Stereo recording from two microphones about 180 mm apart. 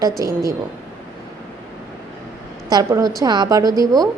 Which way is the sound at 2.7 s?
20° right (ahead or behind).